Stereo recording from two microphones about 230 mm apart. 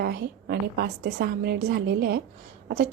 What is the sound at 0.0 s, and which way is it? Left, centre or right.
A woman's voice, right.